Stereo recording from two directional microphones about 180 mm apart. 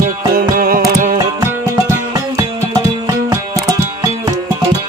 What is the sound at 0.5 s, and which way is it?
Music, 50° right (ahead or behind).